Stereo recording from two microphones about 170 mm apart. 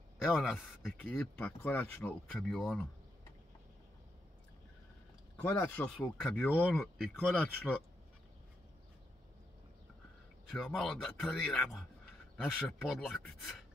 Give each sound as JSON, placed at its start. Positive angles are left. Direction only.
{"t": 0.2, "sound": "speech", "side_deg": 5}
{"t": 5.4, "sound": "speech", "side_deg": 10}
{"t": 10.5, "sound": "speech", "side_deg": 0}